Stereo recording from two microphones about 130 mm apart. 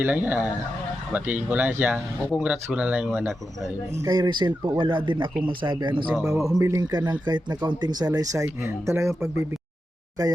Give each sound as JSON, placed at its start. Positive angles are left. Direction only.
{"t": 0.0, "sound": "speech", "side_deg": -15}
{"t": 4.0, "sound": "speech", "side_deg": -30}
{"t": 6.2, "sound": "speech", "side_deg": -25}